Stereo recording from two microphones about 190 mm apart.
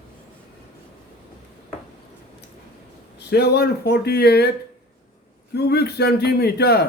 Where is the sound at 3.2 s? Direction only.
60° left (ahead or behind).